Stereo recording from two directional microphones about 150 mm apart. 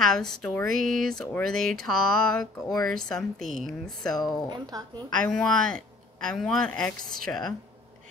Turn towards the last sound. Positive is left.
turn(degrees=5)  # may be behind; listen again after turning